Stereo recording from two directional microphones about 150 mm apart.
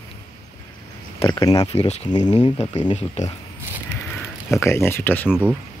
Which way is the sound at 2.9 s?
50° left (ahead or behind).